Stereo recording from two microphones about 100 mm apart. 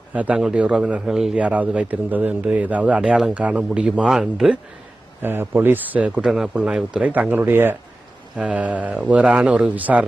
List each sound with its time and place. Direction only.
0.1 s a man's voice: 15° right (ahead or behind)
5.2 s speech: 20° right (ahead or behind)
6.1 s a man's voice: 5° right (ahead or behind)